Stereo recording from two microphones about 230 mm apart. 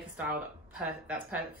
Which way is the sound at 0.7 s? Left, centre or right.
Centre.